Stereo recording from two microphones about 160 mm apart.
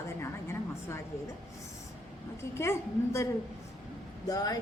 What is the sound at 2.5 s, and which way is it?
A woman's voice, 15° left (ahead or behind).